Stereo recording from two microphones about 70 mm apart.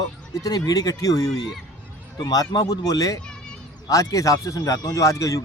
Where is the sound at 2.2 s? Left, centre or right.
Left.